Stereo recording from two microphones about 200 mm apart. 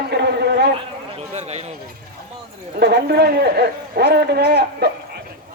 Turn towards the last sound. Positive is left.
turn(degrees=-55)  # may be behind; listen again after turning